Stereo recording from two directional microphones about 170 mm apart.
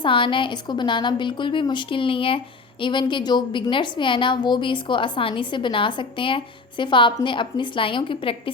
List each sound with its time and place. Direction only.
0.0 s a woman's voice: 30° left (ahead or behind)